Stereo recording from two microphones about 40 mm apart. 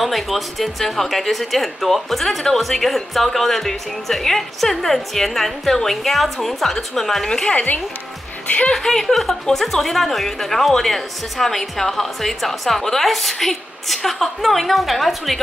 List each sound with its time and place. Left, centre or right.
0.0 s a woman's voice: centre
7.5 s a woman's voice: left
8.6 s a woman's voice: centre